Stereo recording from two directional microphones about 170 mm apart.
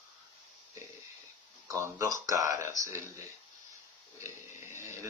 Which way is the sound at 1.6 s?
15° right (ahead or behind).